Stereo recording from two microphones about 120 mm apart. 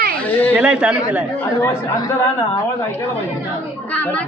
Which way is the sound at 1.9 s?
30° left (ahead or behind).